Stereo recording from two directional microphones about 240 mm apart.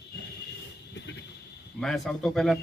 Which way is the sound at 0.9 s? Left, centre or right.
Left.